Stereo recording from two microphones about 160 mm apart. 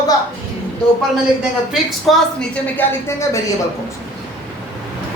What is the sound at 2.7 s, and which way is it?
Speech, 15° left (ahead or behind).